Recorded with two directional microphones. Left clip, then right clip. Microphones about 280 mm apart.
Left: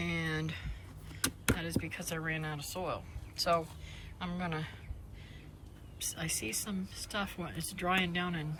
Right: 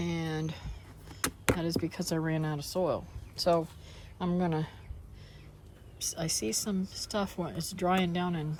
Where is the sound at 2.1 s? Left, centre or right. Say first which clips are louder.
Right 3 dB; centre.